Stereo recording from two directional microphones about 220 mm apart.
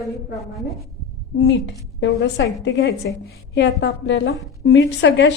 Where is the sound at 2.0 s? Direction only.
55° left (ahead or behind).